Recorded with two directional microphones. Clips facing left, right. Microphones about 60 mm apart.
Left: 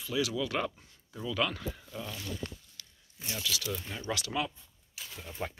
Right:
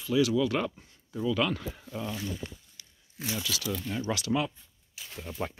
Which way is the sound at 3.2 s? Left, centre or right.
Right.